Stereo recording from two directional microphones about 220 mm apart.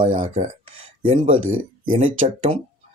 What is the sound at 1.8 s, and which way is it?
Speech, 25° right (ahead or behind).